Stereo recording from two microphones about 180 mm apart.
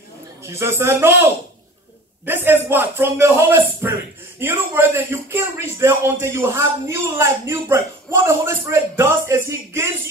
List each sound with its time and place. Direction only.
0.4 s a man's voice: 15° right (ahead or behind)